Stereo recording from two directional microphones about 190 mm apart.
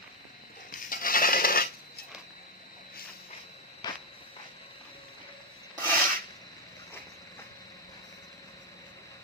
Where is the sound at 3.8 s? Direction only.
20° left (ahead or behind).